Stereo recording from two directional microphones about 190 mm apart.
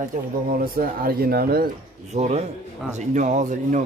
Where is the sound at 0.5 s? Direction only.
50° right (ahead or behind).